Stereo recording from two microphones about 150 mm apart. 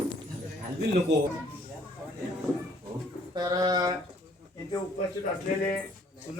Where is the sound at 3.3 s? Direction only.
25° right (ahead or behind).